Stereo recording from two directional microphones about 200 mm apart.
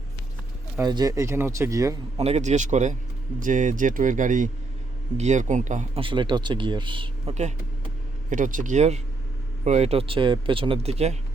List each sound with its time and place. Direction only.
0.8 s speech: 20° right (ahead or behind)
2.1 s speech: 30° right (ahead or behind)